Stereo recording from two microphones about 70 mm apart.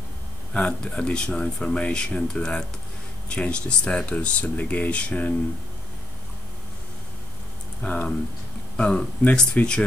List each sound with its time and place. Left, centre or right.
0.5 s speech: centre
7.8 s speech: left